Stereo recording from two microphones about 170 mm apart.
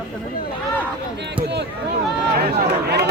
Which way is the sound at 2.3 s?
65° right (ahead or behind).